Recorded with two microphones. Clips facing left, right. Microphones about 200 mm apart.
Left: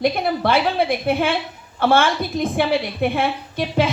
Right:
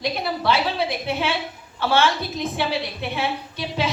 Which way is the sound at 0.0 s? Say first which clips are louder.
Left 5 dB; 55° left (ahead or behind).